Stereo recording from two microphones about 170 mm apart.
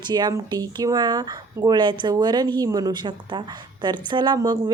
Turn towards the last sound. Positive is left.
turn(degrees=-25)  # may be behind; listen again after turning